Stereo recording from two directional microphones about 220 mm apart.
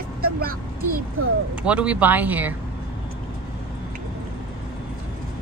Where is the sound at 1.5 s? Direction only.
5° right (ahead or behind).